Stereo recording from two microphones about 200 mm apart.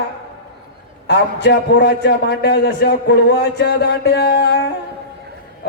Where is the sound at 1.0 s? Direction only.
55° left (ahead or behind).